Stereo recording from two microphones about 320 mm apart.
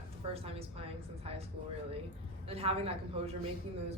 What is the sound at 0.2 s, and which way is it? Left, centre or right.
Speech, centre.